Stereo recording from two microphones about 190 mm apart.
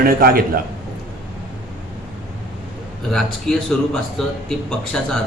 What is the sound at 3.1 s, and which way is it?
A man's voice, centre (ahead or behind).